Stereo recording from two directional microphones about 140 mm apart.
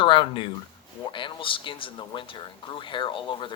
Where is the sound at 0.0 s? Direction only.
35° left (ahead or behind).